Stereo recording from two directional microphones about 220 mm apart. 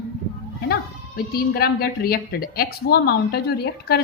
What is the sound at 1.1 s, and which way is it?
A woman's voice, 45° left (ahead or behind).